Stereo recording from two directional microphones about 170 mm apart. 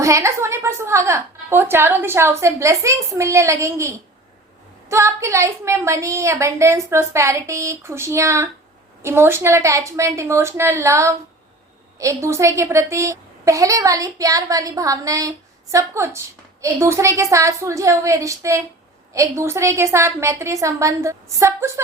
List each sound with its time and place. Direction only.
0.0 s a woman's voice: 15° right (ahead or behind)